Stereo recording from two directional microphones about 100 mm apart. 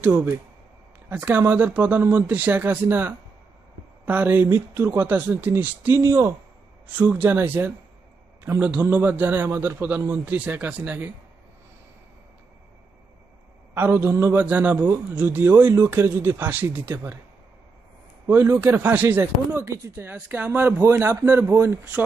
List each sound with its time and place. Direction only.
0.0 s a man's voice: 20° right (ahead or behind)
13.7 s speech: 20° right (ahead or behind)
18.2 s speech: 20° right (ahead or behind)